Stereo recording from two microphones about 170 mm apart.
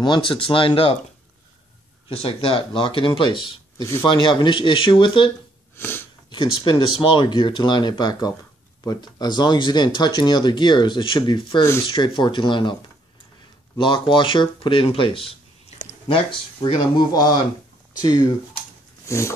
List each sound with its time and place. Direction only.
0.0 s speech: 30° left (ahead or behind)
2.0 s speech: 35° left (ahead or behind)
5.8 s sneeze: 15° left (ahead or behind)
6.3 s speech: 30° left (ahead or behind)
13.7 s speech: 30° left (ahead or behind)
19.0 s speech: 15° left (ahead or behind)